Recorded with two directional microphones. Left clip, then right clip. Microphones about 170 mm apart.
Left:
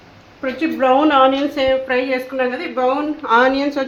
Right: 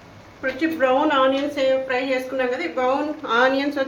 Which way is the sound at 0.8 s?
45° left (ahead or behind).